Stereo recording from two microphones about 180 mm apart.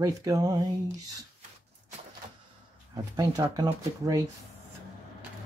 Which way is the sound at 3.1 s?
20° right (ahead or behind).